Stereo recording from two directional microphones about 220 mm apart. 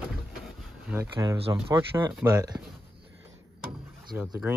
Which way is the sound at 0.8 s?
10° right (ahead or behind).